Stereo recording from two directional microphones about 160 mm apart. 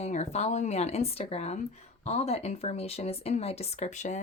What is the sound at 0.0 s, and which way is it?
Speech, 45° left (ahead or behind).